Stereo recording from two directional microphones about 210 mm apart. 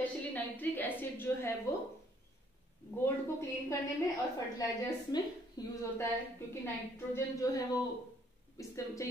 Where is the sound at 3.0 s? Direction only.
15° left (ahead or behind).